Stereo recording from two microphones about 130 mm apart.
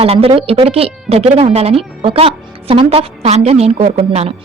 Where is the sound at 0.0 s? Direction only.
50° right (ahead or behind).